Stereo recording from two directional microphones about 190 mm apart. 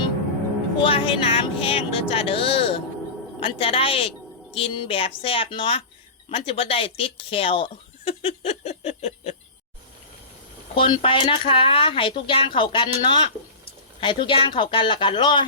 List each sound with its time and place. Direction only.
0.8 s speech: 30° left (ahead or behind)
10.8 s speech: 25° left (ahead or behind)